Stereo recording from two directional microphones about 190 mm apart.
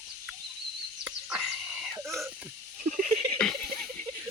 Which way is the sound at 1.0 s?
Centre (ahead or behind).